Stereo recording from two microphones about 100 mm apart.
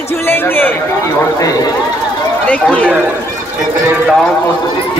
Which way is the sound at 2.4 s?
15° left (ahead or behind).